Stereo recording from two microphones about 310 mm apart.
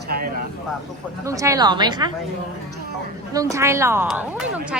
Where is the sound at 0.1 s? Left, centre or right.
Right.